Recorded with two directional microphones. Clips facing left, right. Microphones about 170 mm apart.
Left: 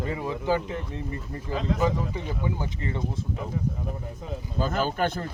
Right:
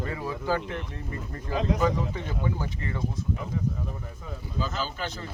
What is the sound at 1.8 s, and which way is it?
Speech, 10° left (ahead or behind).